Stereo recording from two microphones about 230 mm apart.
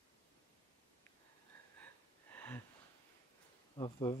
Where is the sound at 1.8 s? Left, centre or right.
Centre.